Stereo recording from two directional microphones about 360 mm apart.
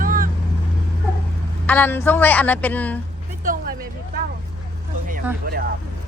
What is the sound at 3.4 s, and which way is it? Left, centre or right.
Vehicle, right.